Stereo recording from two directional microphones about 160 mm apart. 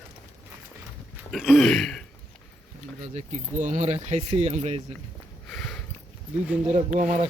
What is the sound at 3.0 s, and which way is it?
Speech, 50° right (ahead or behind).